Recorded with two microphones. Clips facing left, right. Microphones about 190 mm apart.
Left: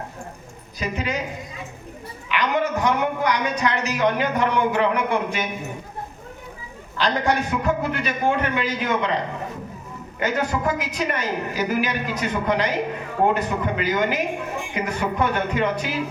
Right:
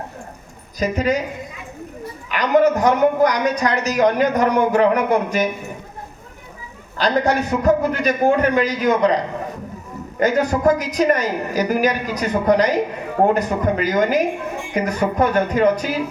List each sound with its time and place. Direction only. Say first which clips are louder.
0.8 s a woman's voice: right 7 dB; 40° right (ahead or behind)
2.3 s a woman's voice: right 7 dB; 40° right (ahead or behind)
6.9 s a woman's voice: right 4 dB; 40° right (ahead or behind)
10.2 s a woman's voice: right 6 dB; 40° right (ahead or behind)